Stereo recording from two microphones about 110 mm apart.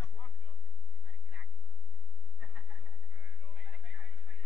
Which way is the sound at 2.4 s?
10° right (ahead or behind).